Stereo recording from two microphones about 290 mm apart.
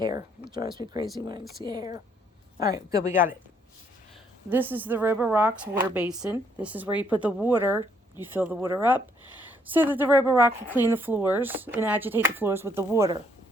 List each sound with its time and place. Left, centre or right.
0.0 s speech: centre
4.4 s a woman's voice: centre